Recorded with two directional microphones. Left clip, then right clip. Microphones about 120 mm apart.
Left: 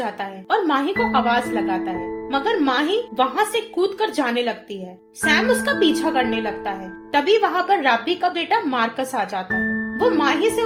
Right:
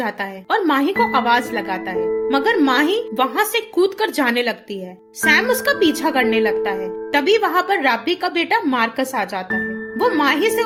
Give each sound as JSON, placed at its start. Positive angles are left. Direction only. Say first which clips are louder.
{"t": 0.0, "sound": "a woman's voice", "louder": "right 3 dB", "side_deg": -30}